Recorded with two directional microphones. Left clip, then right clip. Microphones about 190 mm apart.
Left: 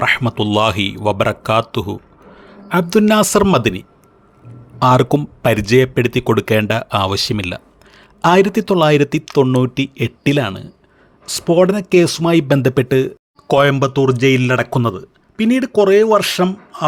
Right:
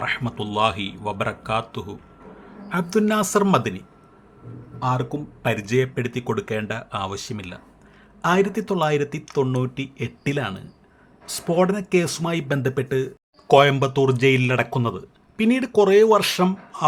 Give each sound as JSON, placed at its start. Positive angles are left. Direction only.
{"t": 0.0, "sound": "speech", "side_deg": 50}
{"t": 4.8, "sound": "speech", "side_deg": 65}
{"t": 13.5, "sound": "speech", "side_deg": 20}